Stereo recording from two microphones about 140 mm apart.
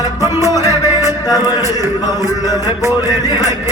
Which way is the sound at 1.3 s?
25° left (ahead or behind).